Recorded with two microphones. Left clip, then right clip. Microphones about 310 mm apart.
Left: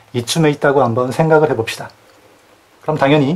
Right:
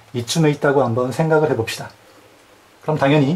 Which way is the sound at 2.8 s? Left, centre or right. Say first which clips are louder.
Left 3 dB; centre.